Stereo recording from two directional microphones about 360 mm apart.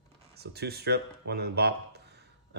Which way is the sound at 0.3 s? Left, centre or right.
Right.